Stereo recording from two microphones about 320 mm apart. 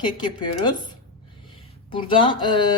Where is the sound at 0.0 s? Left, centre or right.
Centre.